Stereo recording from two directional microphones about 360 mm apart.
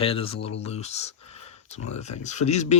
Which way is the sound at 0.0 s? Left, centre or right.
Centre.